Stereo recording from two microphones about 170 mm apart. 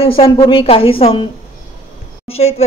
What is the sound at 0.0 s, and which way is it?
Speech, 35° left (ahead or behind).